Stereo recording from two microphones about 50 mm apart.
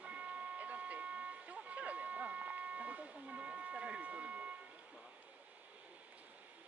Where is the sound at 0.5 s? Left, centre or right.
Right.